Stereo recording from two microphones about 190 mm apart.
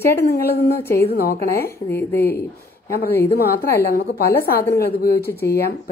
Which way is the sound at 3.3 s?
55° left (ahead or behind).